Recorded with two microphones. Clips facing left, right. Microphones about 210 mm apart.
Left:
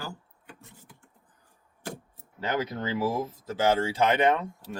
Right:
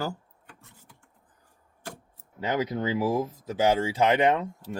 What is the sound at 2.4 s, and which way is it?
Speech, 20° right (ahead or behind).